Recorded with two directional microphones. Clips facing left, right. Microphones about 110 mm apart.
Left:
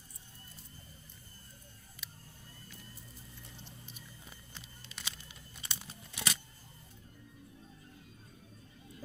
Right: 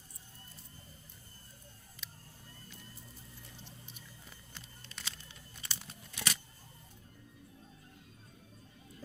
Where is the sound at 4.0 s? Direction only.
15° left (ahead or behind).